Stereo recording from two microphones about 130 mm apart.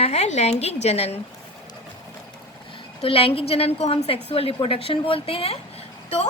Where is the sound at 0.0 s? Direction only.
55° left (ahead or behind).